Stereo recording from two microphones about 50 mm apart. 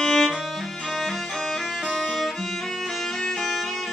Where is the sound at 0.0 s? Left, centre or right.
Centre.